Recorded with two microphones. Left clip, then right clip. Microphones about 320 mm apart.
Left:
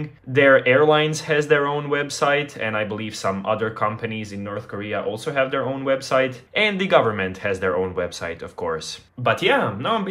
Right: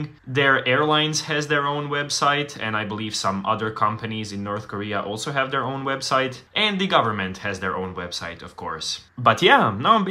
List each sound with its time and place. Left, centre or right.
0.3 s speech: centre
9.2 s speech: centre